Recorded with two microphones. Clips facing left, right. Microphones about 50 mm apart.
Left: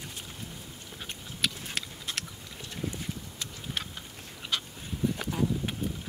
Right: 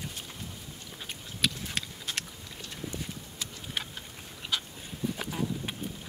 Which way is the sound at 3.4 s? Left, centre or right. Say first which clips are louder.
Even; centre.